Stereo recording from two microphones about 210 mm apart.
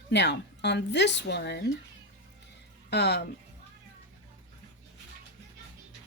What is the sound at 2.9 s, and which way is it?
Speech, 50° left (ahead or behind).